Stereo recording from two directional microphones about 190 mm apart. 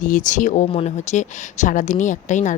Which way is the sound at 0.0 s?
40° left (ahead or behind).